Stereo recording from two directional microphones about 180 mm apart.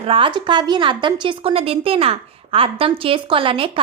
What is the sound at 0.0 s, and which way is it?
A woman's voice, 30° right (ahead or behind).